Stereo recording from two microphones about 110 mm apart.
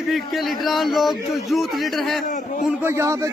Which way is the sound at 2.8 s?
25° right (ahead or behind).